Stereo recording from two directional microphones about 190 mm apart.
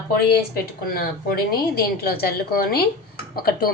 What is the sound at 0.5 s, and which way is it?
A woman's voice, 50° left (ahead or behind).